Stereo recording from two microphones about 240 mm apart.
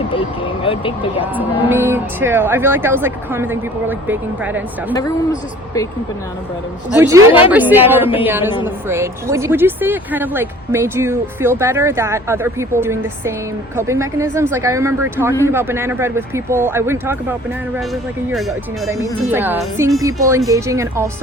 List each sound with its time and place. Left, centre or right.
0.6 s speech: left
1.2 s speech: centre
4.9 s a woman's voice: centre
6.9 s speech: centre